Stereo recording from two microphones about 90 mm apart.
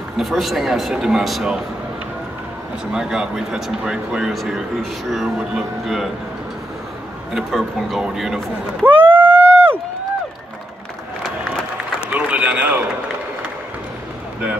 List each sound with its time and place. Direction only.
0.2 s speech: centre (ahead or behind)
2.9 s speech: 5° right (ahead or behind)
7.3 s speech: 5° right (ahead or behind)
8.8 s run: 20° right (ahead or behind)
12.1 s run: 15° right (ahead or behind)